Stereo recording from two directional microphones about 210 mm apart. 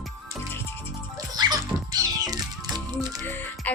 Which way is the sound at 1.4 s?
20° right (ahead or behind).